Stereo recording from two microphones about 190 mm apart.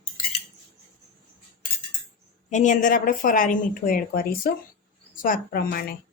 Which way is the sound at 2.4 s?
40° left (ahead or behind).